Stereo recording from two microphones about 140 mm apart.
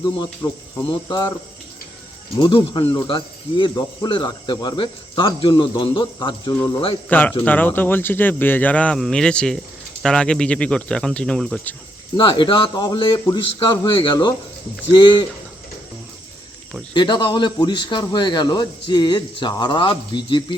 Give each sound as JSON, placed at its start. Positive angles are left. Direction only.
{"t": 1.0, "sound": "speech", "side_deg": 30}
{"t": 2.4, "sound": "speech", "side_deg": 40}
{"t": 7.1, "sound": "speech", "side_deg": 10}
{"t": 12.1, "sound": "speech", "side_deg": 35}
{"t": 16.9, "sound": "speech", "side_deg": 30}